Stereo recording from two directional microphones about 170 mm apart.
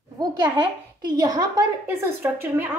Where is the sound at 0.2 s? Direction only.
25° right (ahead or behind).